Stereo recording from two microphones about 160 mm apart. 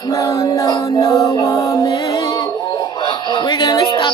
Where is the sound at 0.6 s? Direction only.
30° left (ahead or behind).